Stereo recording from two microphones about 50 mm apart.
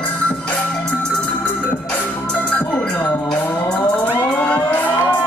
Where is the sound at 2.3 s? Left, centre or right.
Left.